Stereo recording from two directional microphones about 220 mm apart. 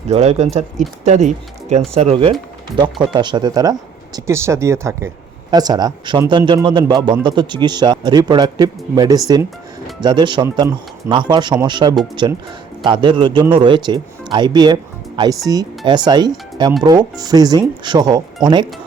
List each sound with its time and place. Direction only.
0.1 s speech: 30° right (ahead or behind)